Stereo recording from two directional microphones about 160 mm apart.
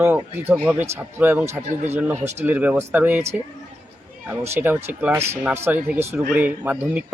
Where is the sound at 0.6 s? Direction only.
10° right (ahead or behind).